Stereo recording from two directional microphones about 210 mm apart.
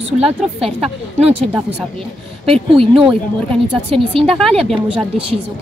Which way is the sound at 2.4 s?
25° right (ahead or behind).